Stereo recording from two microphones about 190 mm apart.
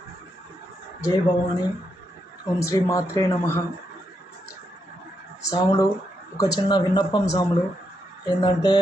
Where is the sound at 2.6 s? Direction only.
15° left (ahead or behind).